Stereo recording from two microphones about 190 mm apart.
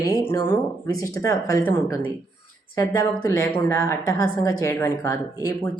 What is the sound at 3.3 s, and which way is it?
A woman's voice, 15° left (ahead or behind).